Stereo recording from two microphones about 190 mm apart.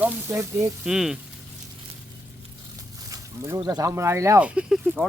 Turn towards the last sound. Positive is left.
turn(degrees=-5)  # may be behind; listen again after turning